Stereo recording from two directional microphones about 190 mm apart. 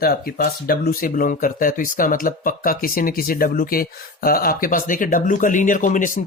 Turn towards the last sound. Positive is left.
turn(degrees=45)  # may be behind; listen again after turning